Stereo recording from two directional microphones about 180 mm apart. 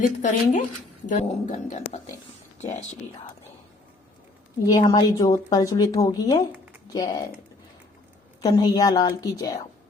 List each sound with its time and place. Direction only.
0.0 s speech: 45° left (ahead or behind)
4.6 s a woman's voice: 20° left (ahead or behind)
8.4 s a woman's voice: 20° left (ahead or behind)